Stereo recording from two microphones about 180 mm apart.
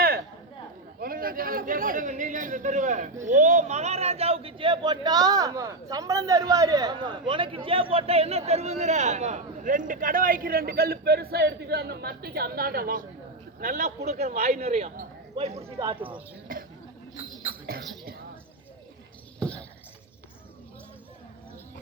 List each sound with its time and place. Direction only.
0.9 s a man's voice: 55° right (ahead or behind); by 16.1 s 25° right (ahead or behind)
16.5 s a man's voice: 50° right (ahead or behind)
19.4 s a sound: 5° left (ahead or behind)